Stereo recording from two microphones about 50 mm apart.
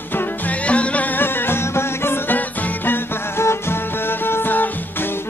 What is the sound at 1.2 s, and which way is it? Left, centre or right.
Music, left.